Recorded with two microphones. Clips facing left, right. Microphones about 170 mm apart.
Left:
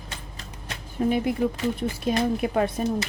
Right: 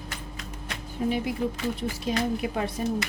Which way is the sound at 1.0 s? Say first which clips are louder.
Left 4 dB; 55° left (ahead or behind).